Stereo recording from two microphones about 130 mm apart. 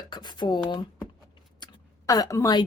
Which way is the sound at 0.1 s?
35° left (ahead or behind).